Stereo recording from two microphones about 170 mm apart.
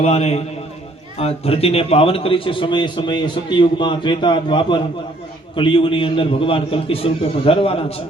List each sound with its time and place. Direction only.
0.0 s a man's voice: 40° left (ahead or behind)